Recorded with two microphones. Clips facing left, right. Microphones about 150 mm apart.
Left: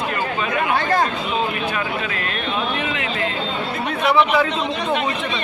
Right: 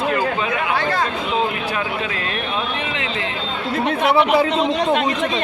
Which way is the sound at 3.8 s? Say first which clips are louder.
Right 1 dB; 25° right (ahead or behind).